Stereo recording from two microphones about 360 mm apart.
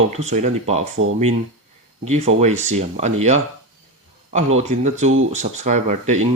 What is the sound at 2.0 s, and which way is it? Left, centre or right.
Speech, centre.